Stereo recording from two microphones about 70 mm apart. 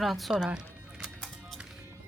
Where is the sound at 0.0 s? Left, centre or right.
Centre.